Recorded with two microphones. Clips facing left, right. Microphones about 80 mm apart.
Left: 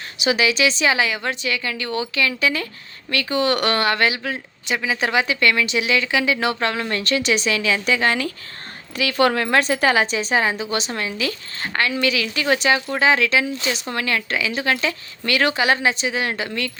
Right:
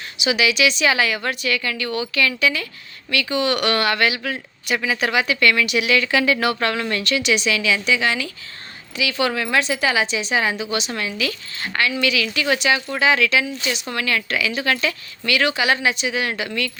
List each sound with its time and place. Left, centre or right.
0.2 s a woman's voice: left
7.0 s a woman's voice: left